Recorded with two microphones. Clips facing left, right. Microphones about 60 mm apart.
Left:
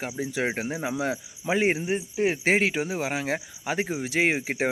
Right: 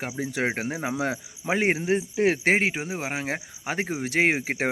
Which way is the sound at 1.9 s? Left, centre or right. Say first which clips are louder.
Right 3 dB; right.